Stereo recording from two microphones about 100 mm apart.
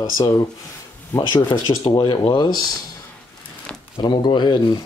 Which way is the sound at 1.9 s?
50° left (ahead or behind).